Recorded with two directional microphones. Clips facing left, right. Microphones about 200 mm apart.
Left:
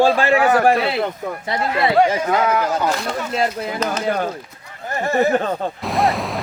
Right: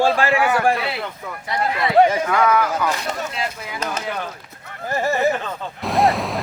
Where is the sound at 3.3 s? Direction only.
45° left (ahead or behind).